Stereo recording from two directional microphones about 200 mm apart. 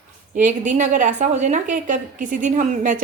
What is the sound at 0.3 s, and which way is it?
A woman's voice, 40° right (ahead or behind).